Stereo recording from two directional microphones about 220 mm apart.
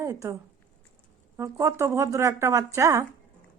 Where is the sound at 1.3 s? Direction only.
15° right (ahead or behind).